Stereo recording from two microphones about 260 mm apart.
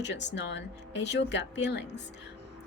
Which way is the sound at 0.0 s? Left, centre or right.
Left.